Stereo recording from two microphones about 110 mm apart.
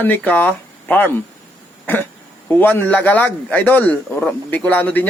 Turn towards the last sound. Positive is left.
turn(degrees=15)  # may be behind; listen again after turning